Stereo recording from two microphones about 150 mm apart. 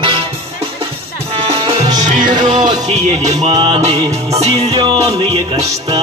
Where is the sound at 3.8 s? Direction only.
45° right (ahead or behind).